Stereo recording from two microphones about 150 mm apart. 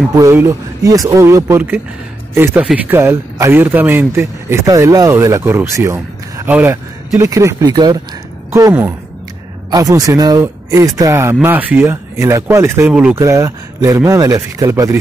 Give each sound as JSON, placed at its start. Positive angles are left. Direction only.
{"t": 0.1, "sound": "a man's voice", "side_deg": -15}
{"t": 13.2, "sound": "speech", "side_deg": -20}